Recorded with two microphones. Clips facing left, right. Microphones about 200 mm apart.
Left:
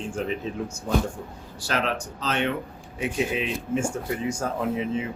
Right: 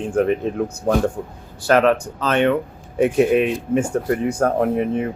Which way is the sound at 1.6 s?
55° right (ahead or behind).